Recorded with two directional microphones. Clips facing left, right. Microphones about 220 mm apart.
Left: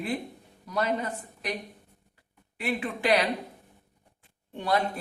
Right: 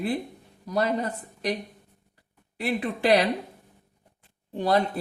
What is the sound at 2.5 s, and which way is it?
Speech, 35° right (ahead or behind).